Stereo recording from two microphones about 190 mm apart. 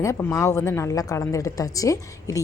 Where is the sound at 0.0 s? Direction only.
15° left (ahead or behind).